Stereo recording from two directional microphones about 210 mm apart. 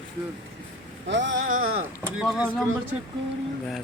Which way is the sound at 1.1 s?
60° right (ahead or behind).